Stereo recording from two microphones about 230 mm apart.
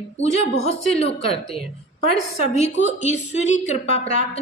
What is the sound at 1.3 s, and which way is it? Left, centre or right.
Speech, centre.